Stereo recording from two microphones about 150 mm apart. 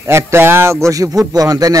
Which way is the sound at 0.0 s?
15° right (ahead or behind).